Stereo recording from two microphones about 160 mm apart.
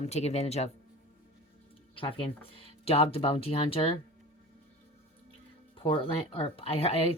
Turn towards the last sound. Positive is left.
turn(degrees=40)  # may be behind; listen again after turning